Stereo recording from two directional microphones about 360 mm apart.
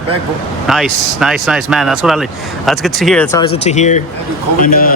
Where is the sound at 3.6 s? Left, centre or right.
Centre.